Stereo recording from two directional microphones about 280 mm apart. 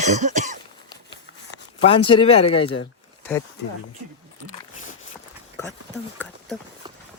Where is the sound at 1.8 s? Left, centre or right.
Centre.